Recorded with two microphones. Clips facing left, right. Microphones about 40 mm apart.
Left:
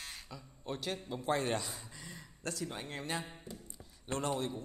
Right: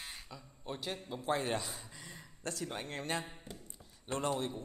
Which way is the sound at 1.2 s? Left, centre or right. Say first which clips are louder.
Left 1 dB; right.